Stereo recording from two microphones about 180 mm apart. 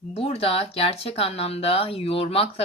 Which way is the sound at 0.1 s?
30° left (ahead or behind).